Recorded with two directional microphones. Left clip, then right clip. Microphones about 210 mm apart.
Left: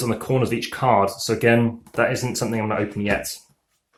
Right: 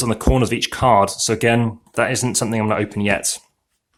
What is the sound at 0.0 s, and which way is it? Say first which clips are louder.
Speech: right 3 dB; 40° right (ahead or behind).